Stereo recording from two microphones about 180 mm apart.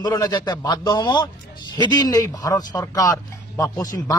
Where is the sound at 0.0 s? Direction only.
20° left (ahead or behind).